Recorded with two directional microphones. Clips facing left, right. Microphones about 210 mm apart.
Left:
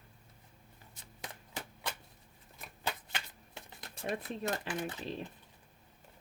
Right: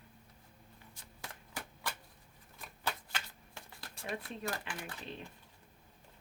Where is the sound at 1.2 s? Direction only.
20° left (ahead or behind).